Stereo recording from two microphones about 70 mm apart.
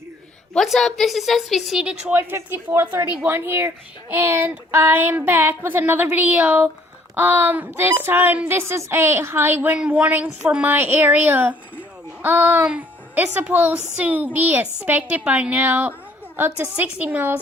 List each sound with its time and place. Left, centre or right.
0.5 s a woman's voice: centre
1.8 s a woman's voice: centre
2.1 s a woman's voice: right
8.4 s a woman's voice: right
9.7 s a woman's voice: centre
10.7 s speech: right